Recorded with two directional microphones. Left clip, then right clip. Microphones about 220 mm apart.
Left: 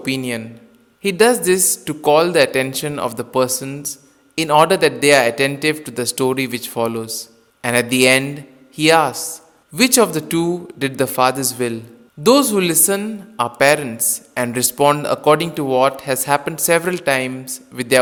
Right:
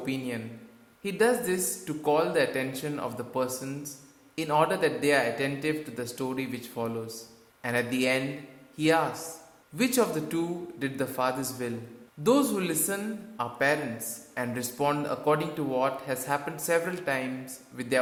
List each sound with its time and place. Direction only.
0.0 s a man's voice: 45° left (ahead or behind)